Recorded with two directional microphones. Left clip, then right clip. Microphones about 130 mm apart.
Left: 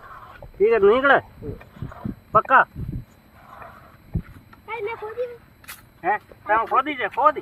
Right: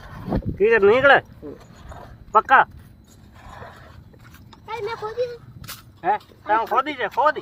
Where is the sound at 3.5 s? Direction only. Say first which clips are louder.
Right 1 dB; 20° right (ahead or behind).